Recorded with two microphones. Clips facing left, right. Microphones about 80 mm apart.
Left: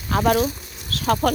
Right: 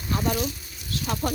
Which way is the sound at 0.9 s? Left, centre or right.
Left.